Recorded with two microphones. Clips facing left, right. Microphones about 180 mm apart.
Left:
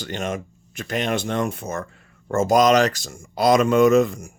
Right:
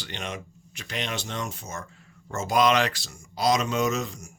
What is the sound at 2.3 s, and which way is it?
A man's voice, 50° left (ahead or behind).